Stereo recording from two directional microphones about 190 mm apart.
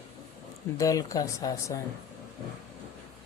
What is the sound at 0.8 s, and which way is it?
Speech, 20° left (ahead or behind).